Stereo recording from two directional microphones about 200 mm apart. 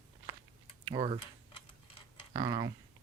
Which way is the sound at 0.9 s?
25° right (ahead or behind).